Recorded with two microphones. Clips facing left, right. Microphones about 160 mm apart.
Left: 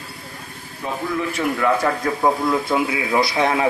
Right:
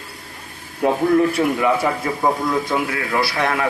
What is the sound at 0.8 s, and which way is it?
Speech, 70° right (ahead or behind).